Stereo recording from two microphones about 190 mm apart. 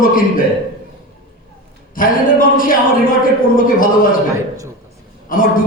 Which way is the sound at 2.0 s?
45° left (ahead or behind).